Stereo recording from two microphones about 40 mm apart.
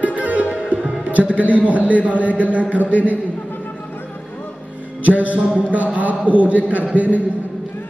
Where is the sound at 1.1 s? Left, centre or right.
Right.